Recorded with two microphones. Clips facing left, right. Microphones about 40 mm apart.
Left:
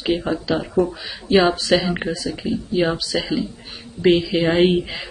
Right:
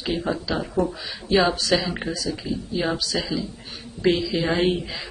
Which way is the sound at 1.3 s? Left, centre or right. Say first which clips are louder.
Left 4 dB; left.